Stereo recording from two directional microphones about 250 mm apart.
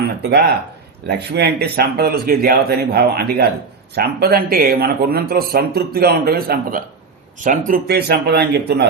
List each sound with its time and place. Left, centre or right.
0.2 s speech: right